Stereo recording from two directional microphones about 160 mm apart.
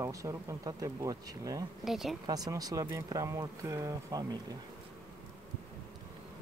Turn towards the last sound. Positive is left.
turn(degrees=-25)  # may be behind; listen again after turning